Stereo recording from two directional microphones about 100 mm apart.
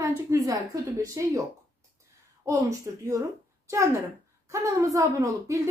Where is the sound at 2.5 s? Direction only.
35° right (ahead or behind).